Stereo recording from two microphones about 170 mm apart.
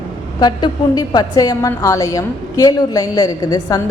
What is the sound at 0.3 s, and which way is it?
A woman's voice, 25° left (ahead or behind).